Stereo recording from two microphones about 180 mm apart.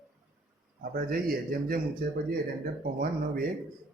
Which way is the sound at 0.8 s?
50° right (ahead or behind).